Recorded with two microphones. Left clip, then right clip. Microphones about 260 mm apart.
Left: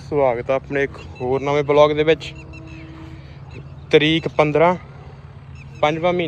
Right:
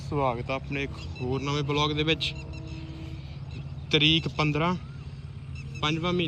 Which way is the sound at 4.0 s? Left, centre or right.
Centre.